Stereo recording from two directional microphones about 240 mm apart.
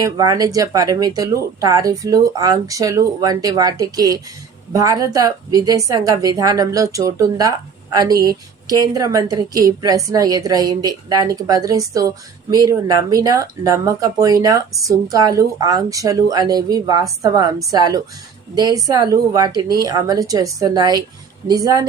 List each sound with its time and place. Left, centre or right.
0.0 s a woman's voice: centre